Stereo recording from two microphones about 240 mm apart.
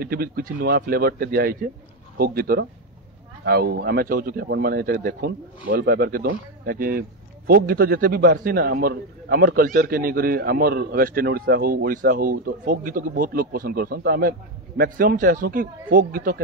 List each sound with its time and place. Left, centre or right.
0.0 s speech: right